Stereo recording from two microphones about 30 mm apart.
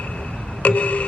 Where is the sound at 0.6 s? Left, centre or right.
Left.